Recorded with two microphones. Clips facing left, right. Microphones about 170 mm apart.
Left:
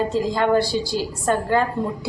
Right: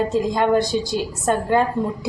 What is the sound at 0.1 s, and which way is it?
A woman's voice, 15° right (ahead or behind).